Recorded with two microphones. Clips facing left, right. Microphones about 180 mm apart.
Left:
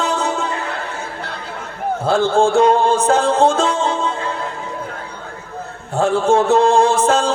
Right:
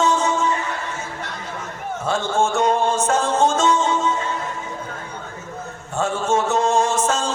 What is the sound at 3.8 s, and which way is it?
Music, 30° left (ahead or behind).